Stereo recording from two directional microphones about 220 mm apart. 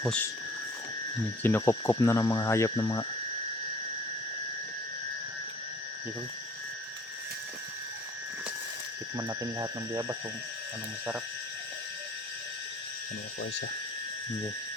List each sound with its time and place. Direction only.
0.0 s speech: 5° left (ahead or behind)
1.4 s speech: 10° left (ahead or behind)
9.1 s speech: 15° right (ahead or behind)